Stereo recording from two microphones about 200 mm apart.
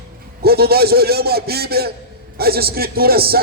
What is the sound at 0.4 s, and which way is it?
A man's voice, 50° right (ahead or behind).